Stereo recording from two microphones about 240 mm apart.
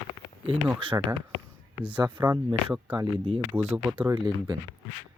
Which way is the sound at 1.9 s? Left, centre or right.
Centre.